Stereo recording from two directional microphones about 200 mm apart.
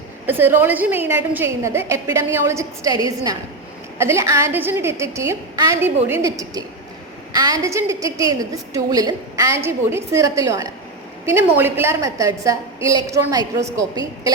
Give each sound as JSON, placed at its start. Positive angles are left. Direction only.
{"t": 0.3, "sound": "a woman's voice", "side_deg": -10}